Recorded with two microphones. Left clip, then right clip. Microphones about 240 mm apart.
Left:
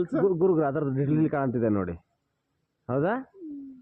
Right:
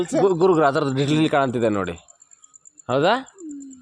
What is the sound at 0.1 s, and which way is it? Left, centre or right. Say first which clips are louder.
Speech: right 7 dB; centre.